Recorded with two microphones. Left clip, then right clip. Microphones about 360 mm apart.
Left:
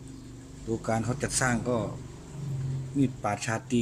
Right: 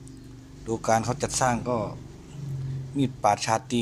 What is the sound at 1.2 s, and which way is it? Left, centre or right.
Speech, centre.